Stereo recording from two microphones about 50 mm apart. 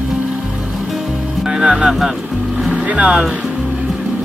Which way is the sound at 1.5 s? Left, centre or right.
Centre.